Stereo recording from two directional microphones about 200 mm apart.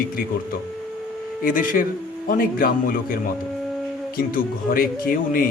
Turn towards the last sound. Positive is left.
turn(degrees=45)  # may be behind; listen again after turning